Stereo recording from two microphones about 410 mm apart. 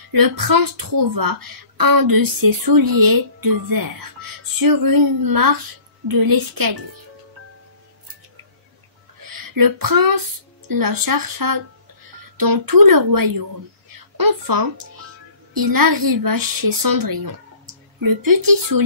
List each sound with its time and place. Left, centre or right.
0.1 s speech: right
9.5 s speech: right